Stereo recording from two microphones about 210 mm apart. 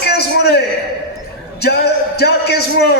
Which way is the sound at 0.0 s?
50° left (ahead or behind).